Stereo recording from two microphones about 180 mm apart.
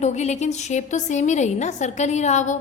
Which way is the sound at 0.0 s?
40° left (ahead or behind).